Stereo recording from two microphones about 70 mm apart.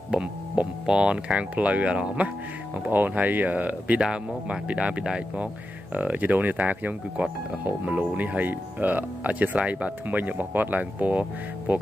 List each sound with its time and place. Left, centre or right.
0.1 s speech: centre